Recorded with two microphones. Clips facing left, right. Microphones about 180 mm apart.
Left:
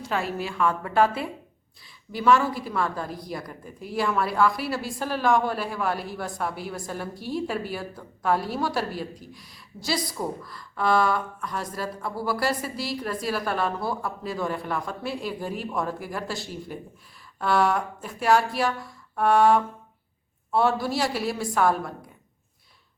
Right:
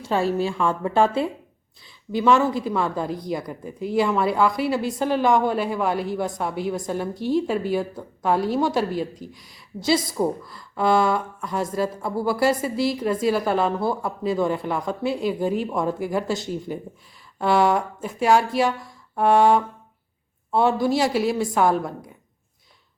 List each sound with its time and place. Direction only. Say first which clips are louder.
0.0 s speech: right 7 dB; 30° right (ahead or behind)
18.6 s a sound: right 4 dB; 25° right (ahead or behind)
20.5 s speech: right 4 dB; 20° right (ahead or behind)